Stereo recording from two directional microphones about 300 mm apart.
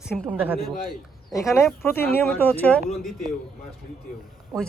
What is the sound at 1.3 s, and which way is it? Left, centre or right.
Speech, centre.